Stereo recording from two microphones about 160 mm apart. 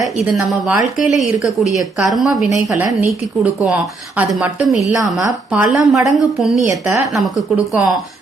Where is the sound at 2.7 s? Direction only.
10° right (ahead or behind).